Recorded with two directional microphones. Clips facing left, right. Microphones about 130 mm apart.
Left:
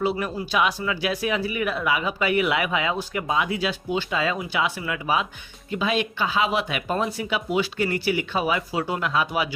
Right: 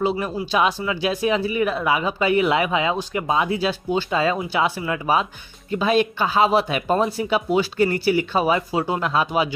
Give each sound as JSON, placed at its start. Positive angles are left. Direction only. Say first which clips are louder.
{"t": 0.0, "sound": "speech", "louder": "right 2 dB", "side_deg": -25}